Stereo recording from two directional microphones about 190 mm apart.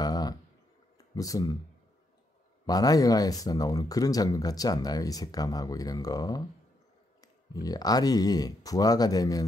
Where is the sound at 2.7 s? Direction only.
20° left (ahead or behind).